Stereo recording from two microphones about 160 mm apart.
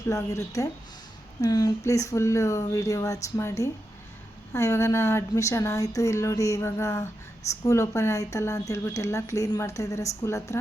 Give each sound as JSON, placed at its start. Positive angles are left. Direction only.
{"t": 0.1, "sound": "speech", "side_deg": 20}